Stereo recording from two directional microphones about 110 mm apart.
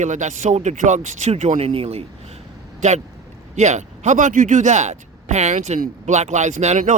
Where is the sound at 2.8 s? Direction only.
90° right.